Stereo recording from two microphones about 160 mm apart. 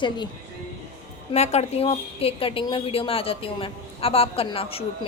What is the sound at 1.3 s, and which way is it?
A woman's voice, 40° left (ahead or behind).